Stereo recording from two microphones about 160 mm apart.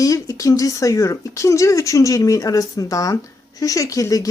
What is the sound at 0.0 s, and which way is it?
Speech, 20° left (ahead or behind).